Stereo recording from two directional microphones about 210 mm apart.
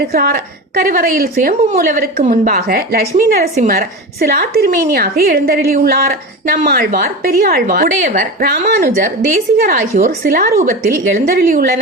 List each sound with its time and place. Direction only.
0.1 s a woman's voice: 45° right (ahead or behind)